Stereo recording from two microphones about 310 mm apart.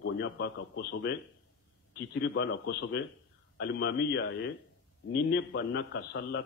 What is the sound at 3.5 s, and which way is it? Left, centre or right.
A man's voice, left.